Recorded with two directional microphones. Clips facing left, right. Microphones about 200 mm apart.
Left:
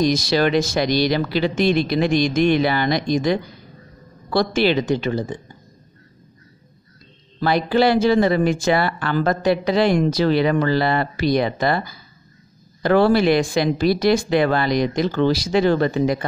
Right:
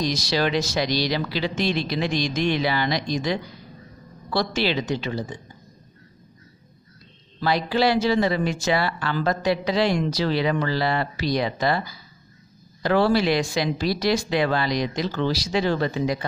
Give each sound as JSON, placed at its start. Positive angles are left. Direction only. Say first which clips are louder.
{"t": 0.0, "sound": "speech", "louder": "left 6 dB", "side_deg": 55}
{"t": 7.3, "sound": "speech", "louder": "left 5 dB", "side_deg": 55}